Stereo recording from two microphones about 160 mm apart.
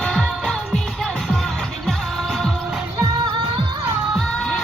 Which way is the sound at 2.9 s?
25° right (ahead or behind).